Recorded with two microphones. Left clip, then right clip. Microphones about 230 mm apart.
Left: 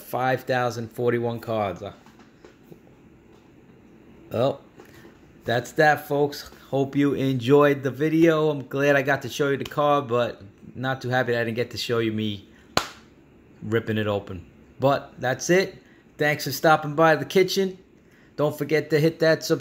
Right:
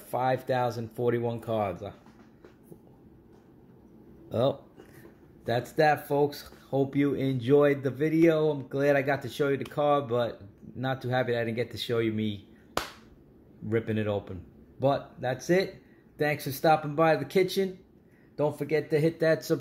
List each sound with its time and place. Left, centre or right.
0.1 s speech: centre
4.3 s speech: centre